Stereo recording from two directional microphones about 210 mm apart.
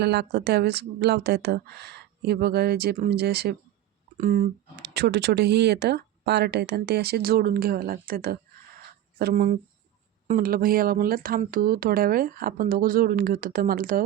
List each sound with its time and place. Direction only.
0.0 s speech: 50° right (ahead or behind)
4.9 s speech: 50° right (ahead or behind)